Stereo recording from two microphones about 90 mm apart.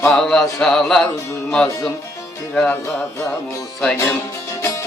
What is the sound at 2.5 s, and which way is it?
Speech, 10° left (ahead or behind).